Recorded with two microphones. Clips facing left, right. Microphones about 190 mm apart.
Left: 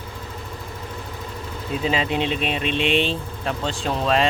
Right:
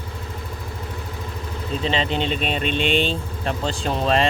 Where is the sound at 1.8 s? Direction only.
5° left (ahead or behind).